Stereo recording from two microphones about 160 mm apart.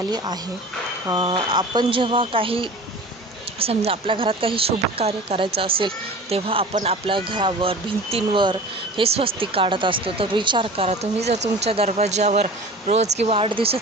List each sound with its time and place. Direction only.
0.0 s speech: 25° right (ahead or behind)